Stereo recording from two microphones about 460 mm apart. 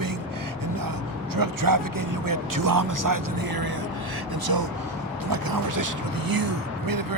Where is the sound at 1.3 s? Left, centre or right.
Right.